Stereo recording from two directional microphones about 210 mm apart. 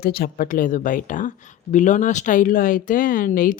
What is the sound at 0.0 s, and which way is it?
Speech, 45° left (ahead or behind).